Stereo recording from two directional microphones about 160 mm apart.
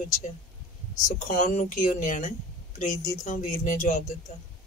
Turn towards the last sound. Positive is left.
turn(degrees=50)  # may be behind; listen again after turning